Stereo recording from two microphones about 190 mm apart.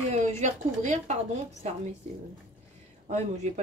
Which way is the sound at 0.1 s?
40° right (ahead or behind).